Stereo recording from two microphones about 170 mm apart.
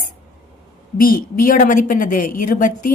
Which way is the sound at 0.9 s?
55° left (ahead or behind).